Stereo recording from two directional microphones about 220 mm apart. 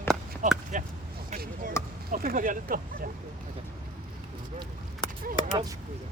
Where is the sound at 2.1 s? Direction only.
40° right (ahead or behind).